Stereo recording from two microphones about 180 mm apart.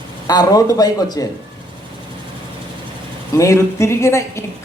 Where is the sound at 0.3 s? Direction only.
20° left (ahead or behind).